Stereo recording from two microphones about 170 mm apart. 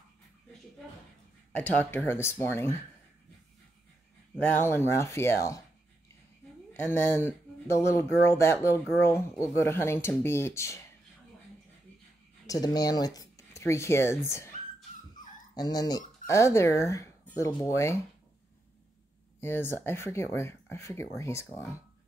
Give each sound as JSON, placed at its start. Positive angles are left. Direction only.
{"t": 1.8, "sound": "speech", "side_deg": 10}
{"t": 4.4, "sound": "speech", "side_deg": 15}
{"t": 6.9, "sound": "speech", "side_deg": 15}
{"t": 12.4, "sound": "speech", "side_deg": 25}
{"t": 15.1, "sound": "dog", "side_deg": 25}
{"t": 16.3, "sound": "speech", "side_deg": 15}
{"t": 19.4, "sound": "speech", "side_deg": 15}